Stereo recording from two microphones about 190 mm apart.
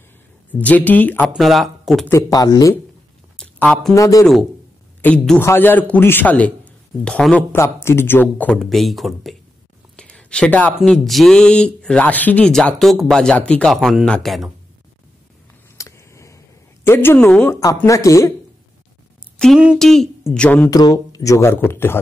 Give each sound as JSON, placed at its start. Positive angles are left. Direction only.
{"t": 0.5, "sound": "a man's voice", "side_deg": 10}
{"t": 1.2, "sound": "speech", "side_deg": 0}
{"t": 2.0, "sound": "a man's voice", "side_deg": 15}
{"t": 3.3, "sound": "speech", "side_deg": 5}
{"t": 5.0, "sound": "a man's voice", "side_deg": 5}
{"t": 9.9, "sound": "a sound", "side_deg": 5}
{"t": 10.8, "sound": "speech", "side_deg": 0}
{"t": 15.8, "sound": "a sound", "side_deg": 15}
{"t": 16.8, "sound": "a man's voice", "side_deg": 10}
{"t": 19.3, "sound": "a man's voice", "side_deg": 0}
{"t": 20.7, "sound": "a man's voice", "side_deg": 20}